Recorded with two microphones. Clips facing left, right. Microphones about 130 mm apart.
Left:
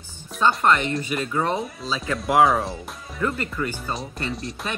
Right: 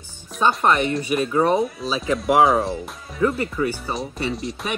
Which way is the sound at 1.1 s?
25° right (ahead or behind).